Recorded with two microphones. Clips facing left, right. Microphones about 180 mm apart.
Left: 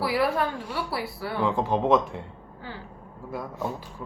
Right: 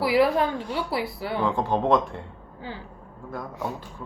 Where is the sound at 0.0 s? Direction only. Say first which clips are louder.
Right 4 dB; 15° right (ahead or behind).